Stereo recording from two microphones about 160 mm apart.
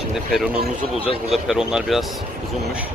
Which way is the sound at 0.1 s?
Centre (ahead or behind).